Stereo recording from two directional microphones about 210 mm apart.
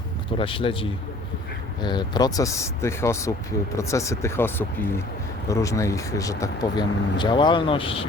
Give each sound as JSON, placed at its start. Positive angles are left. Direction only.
{"t": 0.3, "sound": "a man's voice", "side_deg": 25}